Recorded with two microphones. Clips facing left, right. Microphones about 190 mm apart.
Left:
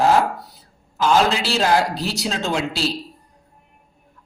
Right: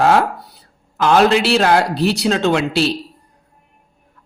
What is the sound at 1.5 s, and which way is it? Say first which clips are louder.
A woman's voice: right 4 dB; 65° right (ahead or behind).